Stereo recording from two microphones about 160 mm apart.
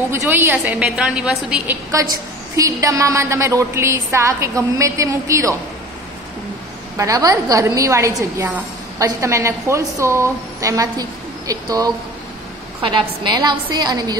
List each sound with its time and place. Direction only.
0.1 s a woman's voice: 15° right (ahead or behind)
2.5 s a woman's voice: 20° right (ahead or behind)
7.0 s a woman's voice: 20° right (ahead or behind)